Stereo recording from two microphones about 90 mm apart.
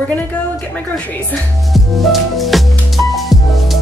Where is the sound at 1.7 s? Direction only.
Centre (ahead or behind).